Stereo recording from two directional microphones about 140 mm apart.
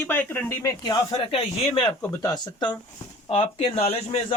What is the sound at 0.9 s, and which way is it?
A man's voice, 40° left (ahead or behind).